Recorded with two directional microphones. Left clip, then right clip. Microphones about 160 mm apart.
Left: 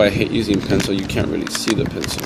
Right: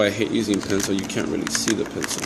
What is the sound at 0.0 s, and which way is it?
Speech, 40° left (ahead or behind).